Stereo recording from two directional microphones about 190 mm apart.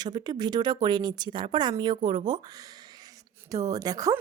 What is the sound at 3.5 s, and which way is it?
Speech, 20° right (ahead or behind).